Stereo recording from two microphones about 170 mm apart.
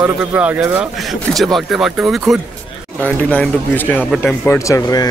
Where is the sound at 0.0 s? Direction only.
10° right (ahead or behind).